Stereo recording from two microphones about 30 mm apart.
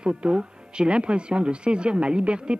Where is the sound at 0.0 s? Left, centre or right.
Right.